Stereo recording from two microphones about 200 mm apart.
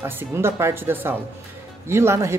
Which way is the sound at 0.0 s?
10° right (ahead or behind).